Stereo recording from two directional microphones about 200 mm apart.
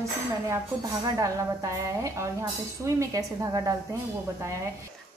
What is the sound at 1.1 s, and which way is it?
A woman's voice, 15° right (ahead or behind).